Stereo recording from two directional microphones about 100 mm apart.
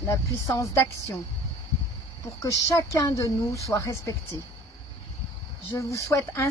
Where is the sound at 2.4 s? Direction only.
35° left (ahead or behind).